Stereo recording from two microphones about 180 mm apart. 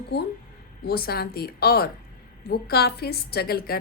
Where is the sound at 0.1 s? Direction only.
65° left (ahead or behind).